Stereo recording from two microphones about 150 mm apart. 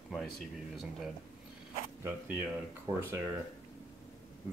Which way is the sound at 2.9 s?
30° right (ahead or behind).